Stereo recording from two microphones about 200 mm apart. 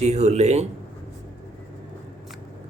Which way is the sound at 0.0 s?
35° right (ahead or behind).